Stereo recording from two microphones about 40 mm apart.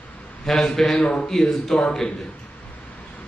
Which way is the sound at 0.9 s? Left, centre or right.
Left.